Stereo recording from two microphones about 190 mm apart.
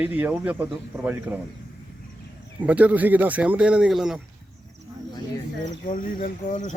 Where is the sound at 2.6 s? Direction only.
5° right (ahead or behind).